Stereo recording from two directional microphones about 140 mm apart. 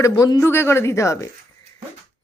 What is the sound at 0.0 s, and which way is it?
A woman's voice, 25° left (ahead or behind).